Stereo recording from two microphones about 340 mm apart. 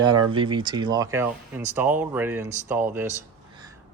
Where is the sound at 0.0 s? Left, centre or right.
Centre.